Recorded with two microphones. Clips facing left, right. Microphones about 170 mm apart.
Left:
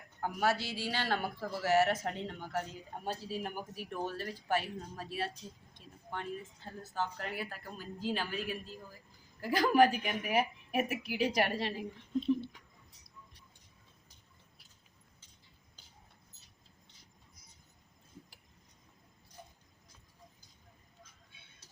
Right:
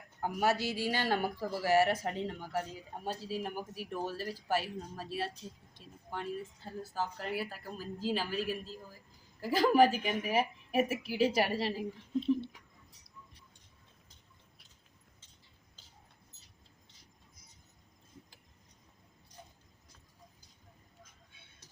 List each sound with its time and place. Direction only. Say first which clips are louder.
0.2 s a man's voice: right 1 dB; 10° right (ahead or behind)
0.5 s a man's voice: right 4 dB; 40° right (ahead or behind)
0.9 s speech: right 2 dB; 10° right (ahead or behind)